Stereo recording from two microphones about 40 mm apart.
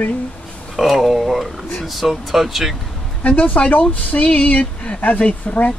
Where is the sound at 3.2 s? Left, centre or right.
Left.